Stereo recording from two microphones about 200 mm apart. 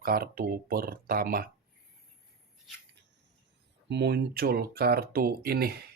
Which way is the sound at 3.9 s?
60° right (ahead or behind).